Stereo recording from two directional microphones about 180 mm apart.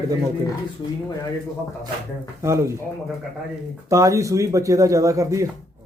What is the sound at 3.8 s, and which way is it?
A man's voice, 15° right (ahead or behind).